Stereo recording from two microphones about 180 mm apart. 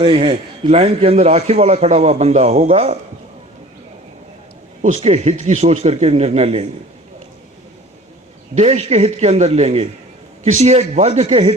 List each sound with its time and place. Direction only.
0.0 s a man's voice: 30° right (ahead or behind)
4.8 s a man's voice: 40° right (ahead or behind)
8.5 s a man's voice: 40° right (ahead or behind)